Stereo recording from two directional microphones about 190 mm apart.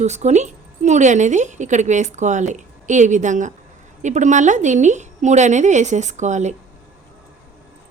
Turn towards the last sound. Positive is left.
turn(degrees=-40)  # may be behind; listen again after turning